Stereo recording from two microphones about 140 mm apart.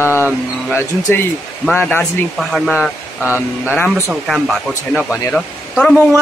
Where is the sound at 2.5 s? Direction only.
Centre (ahead or behind).